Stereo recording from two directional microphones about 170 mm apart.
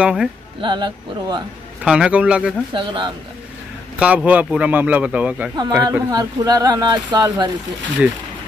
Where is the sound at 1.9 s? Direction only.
5° right (ahead or behind).